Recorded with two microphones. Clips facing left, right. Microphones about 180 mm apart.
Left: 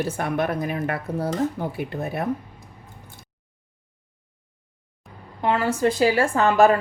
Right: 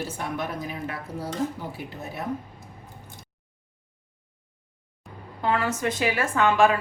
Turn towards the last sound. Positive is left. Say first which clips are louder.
# left 3 dB
turn(degrees=40)  # may be behind; listen again after turning